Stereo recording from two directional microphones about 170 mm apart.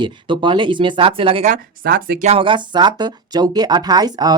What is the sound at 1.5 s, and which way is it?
Speech, 60° right (ahead or behind).